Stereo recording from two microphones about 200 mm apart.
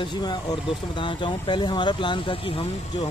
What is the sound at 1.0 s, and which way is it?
Speech, 25° left (ahead or behind).